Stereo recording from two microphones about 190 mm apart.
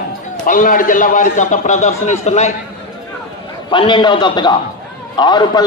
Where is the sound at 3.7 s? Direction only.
25° left (ahead or behind).